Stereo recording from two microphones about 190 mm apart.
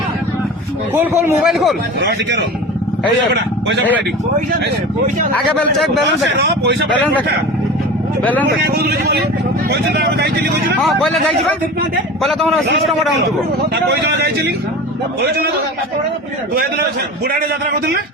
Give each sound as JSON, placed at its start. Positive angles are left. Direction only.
{"t": 0.9, "sound": "speech", "side_deg": -10}
{"t": 1.5, "sound": "speech", "side_deg": 0}
{"t": 8.6, "sound": "speech", "side_deg": -55}
{"t": 12.2, "sound": "speech", "side_deg": 0}
{"t": 13.6, "sound": "speech", "side_deg": -60}